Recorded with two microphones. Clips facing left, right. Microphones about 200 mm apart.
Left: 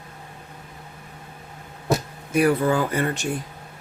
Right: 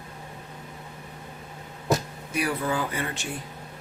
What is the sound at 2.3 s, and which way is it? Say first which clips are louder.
Speech: left 8 dB; 50° left (ahead or behind).